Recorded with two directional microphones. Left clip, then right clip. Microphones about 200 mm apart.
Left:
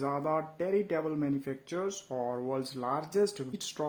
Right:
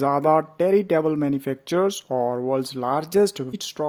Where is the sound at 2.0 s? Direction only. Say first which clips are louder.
Right 11 dB; 35° right (ahead or behind).